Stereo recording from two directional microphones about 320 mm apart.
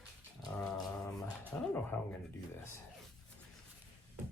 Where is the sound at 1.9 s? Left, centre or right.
Centre.